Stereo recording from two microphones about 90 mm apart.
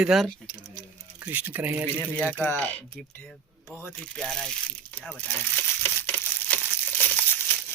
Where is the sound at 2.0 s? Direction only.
20° left (ahead or behind).